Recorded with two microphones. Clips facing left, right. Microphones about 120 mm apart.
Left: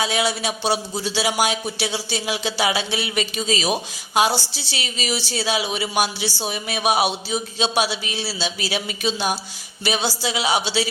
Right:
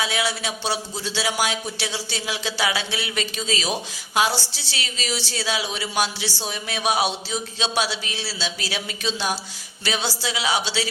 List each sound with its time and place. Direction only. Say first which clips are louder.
0.0 s a man's voice: left 3 dB; 20° left (ahead or behind)